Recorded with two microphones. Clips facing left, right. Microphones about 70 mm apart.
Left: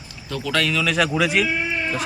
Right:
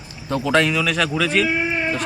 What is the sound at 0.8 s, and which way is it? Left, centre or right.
Speech, centre.